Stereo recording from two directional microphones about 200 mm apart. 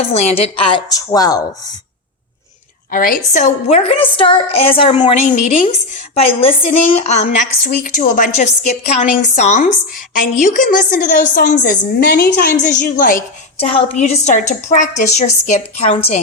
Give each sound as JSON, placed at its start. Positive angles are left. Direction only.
{"t": 0.1, "sound": "a woman's voice", "side_deg": 30}
{"t": 2.9, "sound": "a woman's voice", "side_deg": 45}
{"t": 13.6, "sound": "a woman's voice", "side_deg": 30}